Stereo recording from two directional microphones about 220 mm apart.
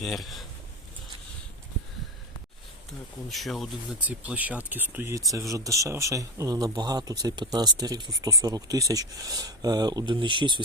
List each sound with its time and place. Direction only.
0.0 s speech: centre (ahead or behind)
3.2 s speech: centre (ahead or behind); by 10.6 s 20° right (ahead or behind)